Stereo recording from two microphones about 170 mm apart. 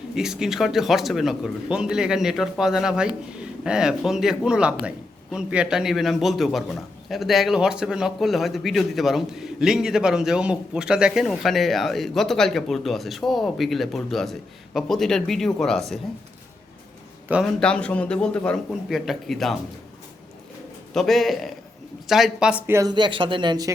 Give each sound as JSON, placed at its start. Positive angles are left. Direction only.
{"t": 0.1, "sound": "a man's voice", "side_deg": -5}
{"t": 17.4, "sound": "a man's voice", "side_deg": 5}
{"t": 20.9, "sound": "a man's voice", "side_deg": 0}